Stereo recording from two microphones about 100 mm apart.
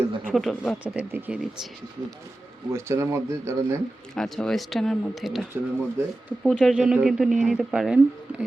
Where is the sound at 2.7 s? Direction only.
25° right (ahead or behind).